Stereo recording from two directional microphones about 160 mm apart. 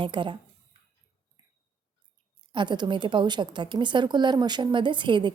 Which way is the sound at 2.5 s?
30° right (ahead or behind).